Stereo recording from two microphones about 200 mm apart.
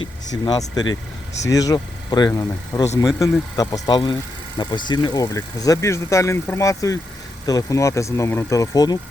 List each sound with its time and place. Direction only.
0.3 s speech: 20° left (ahead or behind)